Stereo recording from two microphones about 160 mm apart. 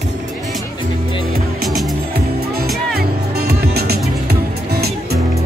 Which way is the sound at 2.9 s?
80° right.